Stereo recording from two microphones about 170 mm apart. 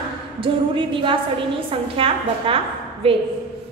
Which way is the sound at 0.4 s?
30° right (ahead or behind).